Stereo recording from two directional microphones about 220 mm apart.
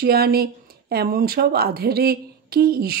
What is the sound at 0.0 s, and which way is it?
Speech, 45° right (ahead or behind).